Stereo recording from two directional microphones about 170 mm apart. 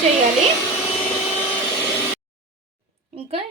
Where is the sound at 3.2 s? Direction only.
35° right (ahead or behind).